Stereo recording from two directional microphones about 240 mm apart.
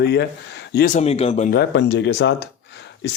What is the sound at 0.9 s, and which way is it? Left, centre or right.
Speech, left.